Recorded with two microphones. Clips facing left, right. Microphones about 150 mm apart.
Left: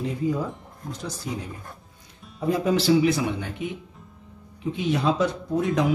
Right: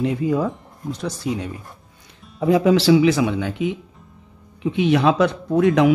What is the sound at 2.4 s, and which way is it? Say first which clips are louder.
Speech: right 6 dB; 90° right.